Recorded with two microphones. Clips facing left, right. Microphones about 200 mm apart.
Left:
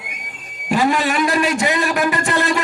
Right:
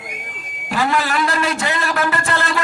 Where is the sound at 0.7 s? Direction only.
15° left (ahead or behind).